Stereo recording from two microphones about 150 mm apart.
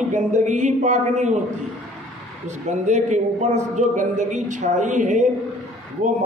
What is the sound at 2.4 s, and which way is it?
A man's voice, 55° right (ahead or behind).